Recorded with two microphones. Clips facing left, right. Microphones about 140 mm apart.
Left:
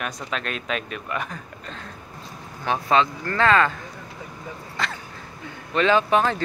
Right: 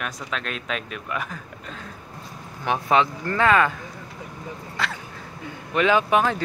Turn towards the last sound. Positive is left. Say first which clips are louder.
# even
turn(degrees=-5)  # may be behind; listen again after turning